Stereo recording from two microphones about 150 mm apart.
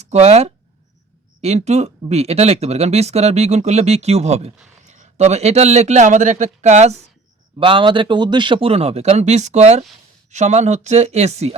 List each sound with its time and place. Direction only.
0.0 s speech: 45° right (ahead or behind)
7.6 s a man's voice: 35° right (ahead or behind)